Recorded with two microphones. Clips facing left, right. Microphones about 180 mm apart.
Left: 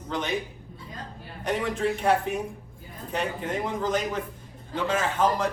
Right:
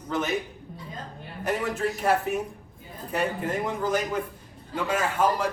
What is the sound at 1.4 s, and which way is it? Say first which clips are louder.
A man's voice: even; 5° right (ahead or behind).